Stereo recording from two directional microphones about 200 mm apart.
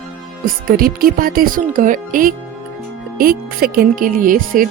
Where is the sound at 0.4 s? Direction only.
45° right (ahead or behind).